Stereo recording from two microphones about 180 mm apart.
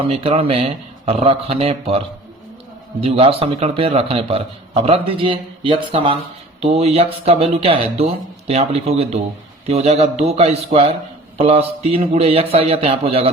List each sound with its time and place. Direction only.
0.0 s a man's voice: 30° right (ahead or behind)